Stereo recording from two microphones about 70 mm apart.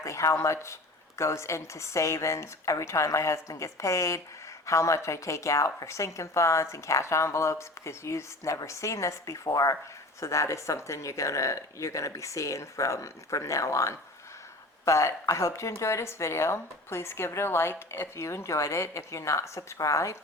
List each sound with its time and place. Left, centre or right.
0.0 s a woman's voice: left